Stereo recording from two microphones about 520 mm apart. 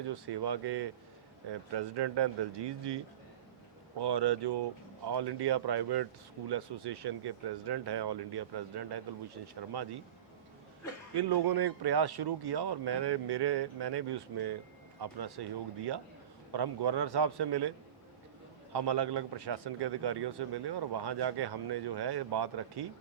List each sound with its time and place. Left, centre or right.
0.1 s a man's voice: right
11.2 s a man's voice: right